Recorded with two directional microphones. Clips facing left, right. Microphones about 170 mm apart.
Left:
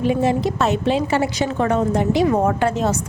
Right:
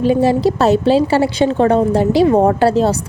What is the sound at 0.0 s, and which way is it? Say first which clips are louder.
A woman's voice: right 5 dB; 35° right (ahead or behind).